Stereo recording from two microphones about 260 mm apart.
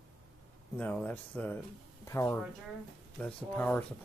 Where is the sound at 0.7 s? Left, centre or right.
Centre.